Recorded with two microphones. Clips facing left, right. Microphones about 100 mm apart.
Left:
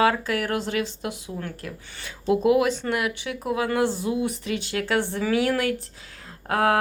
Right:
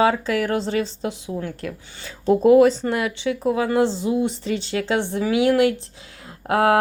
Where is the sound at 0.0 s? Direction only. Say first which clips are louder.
Right 3 dB; 30° right (ahead or behind).